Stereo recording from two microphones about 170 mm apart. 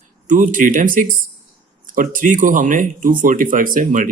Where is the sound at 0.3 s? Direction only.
50° right (ahead or behind).